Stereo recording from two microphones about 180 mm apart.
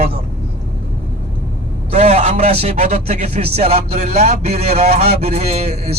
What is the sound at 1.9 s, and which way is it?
Speech, 35° right (ahead or behind).